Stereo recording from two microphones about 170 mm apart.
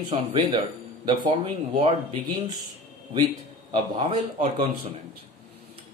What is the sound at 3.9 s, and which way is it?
Speech, 30° right (ahead or behind).